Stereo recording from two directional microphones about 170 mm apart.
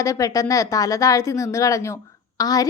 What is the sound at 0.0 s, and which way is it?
A woman's voice, 20° left (ahead or behind).